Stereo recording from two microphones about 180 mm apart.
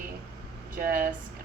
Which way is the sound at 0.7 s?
55° right (ahead or behind).